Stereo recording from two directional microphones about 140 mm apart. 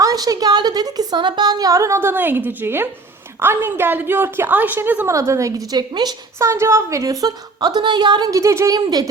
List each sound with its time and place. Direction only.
0.0 s a woman's voice: 25° right (ahead or behind)